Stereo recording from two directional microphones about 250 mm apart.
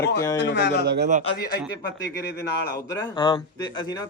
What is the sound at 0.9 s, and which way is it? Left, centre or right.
Speech, right.